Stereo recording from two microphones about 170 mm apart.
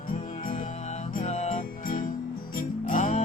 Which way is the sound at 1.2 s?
40° left (ahead or behind).